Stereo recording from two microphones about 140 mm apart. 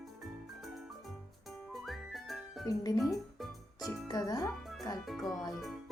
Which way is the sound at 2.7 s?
25° left (ahead or behind).